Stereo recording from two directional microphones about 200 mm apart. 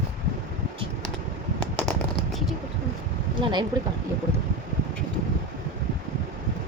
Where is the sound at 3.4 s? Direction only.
20° right (ahead or behind).